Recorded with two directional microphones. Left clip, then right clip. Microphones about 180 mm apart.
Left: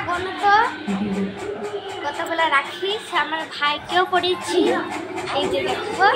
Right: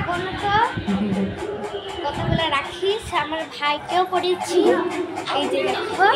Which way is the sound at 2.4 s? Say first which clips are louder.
Left 5 dB; 10° right (ahead or behind).